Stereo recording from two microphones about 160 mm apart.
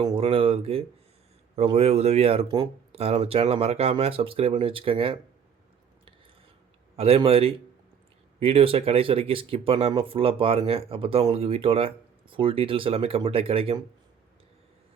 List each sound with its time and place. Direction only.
0.0 s speech: 35° right (ahead or behind)
6.9 s speech: 40° right (ahead or behind)